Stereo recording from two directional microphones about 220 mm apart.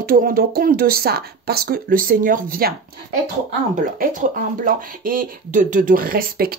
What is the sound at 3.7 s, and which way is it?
Speech, 35° right (ahead or behind).